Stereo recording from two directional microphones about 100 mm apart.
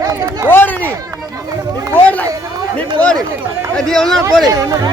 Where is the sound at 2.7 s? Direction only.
15° left (ahead or behind).